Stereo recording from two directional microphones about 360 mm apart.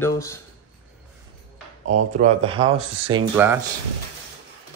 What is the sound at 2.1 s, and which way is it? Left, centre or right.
Speech, centre.